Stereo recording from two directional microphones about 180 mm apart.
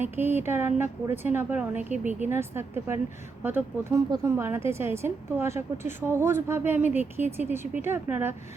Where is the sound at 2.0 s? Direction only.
40° right (ahead or behind).